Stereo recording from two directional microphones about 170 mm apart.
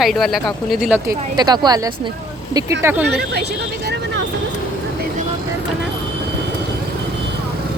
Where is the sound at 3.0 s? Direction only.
75° right (ahead or behind).